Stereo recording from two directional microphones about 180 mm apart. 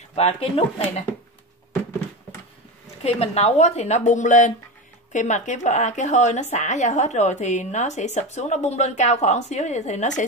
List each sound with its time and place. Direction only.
0.1 s speech: 35° left (ahead or behind)
3.0 s speech: 35° left (ahead or behind)